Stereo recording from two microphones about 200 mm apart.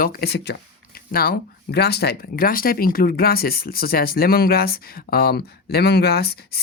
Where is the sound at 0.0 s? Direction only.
50° left (ahead or behind).